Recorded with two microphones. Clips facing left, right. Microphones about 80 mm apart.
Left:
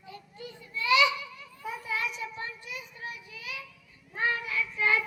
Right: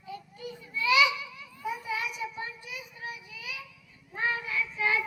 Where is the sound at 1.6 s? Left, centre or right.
Centre.